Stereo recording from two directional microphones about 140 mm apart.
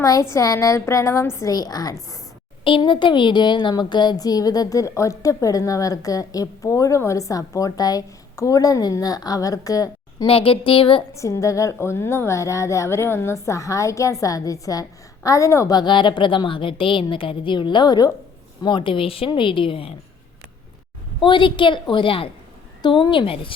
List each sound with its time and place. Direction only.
0.0 s a woman's voice: 20° left (ahead or behind)
2.6 s a woman's voice: 40° left (ahead or behind)
10.2 s speech: 40° left (ahead or behind)
11.1 s a woman's voice: 20° left (ahead or behind); by 19.9 s 40° left (ahead or behind)
21.2 s speech: 35° left (ahead or behind)